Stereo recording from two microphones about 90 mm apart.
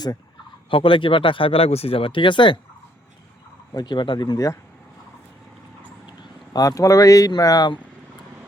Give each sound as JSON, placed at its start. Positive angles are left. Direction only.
{"t": 0.7, "sound": "speech", "side_deg": 75}
{"t": 3.8, "sound": "speech", "side_deg": 55}
{"t": 6.5, "sound": "speech", "side_deg": 40}